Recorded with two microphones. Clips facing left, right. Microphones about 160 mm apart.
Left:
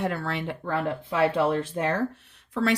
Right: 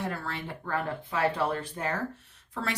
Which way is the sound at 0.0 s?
70° left (ahead or behind).